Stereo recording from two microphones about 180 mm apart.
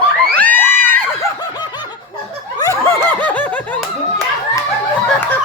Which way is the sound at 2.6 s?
15° left (ahead or behind).